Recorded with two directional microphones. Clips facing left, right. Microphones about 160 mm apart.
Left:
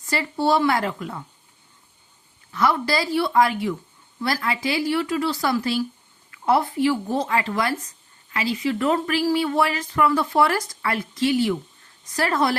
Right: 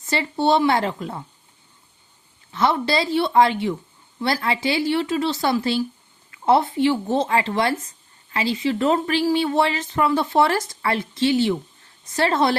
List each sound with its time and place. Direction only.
0.0 s a woman's voice: 25° right (ahead or behind)
2.5 s a woman's voice: 25° right (ahead or behind)